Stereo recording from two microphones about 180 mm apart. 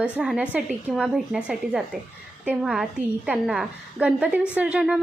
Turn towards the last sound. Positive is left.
turn(degrees=-5)  # may be behind; listen again after turning